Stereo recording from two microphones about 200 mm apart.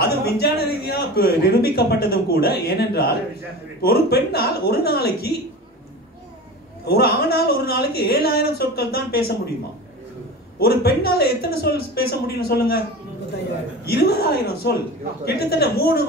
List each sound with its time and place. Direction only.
0.0 s a man's voice: 50° left (ahead or behind)
6.8 s a man's voice: 50° left (ahead or behind)
10.6 s a man's voice: 50° left (ahead or behind)
13.8 s a man's voice: 50° left (ahead or behind)